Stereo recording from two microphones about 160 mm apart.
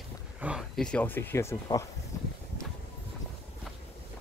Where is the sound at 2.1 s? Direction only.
15° left (ahead or behind).